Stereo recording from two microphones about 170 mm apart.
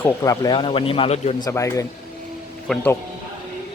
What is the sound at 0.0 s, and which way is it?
Speech, 15° left (ahead or behind).